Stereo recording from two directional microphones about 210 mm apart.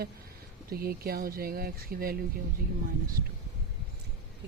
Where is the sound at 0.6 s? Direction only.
45° right (ahead or behind).